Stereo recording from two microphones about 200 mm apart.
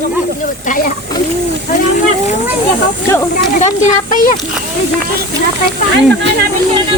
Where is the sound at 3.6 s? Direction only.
40° left (ahead or behind).